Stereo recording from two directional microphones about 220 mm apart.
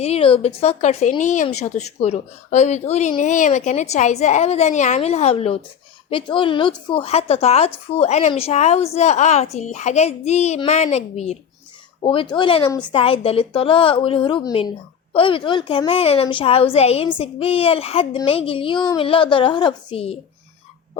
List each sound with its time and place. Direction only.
0.0 s a woman's voice: 25° left (ahead or behind)